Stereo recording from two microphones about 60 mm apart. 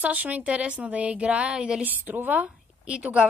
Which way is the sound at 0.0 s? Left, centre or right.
Right.